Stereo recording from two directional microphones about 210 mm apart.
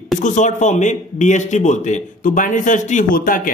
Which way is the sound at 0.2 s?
35° left (ahead or behind).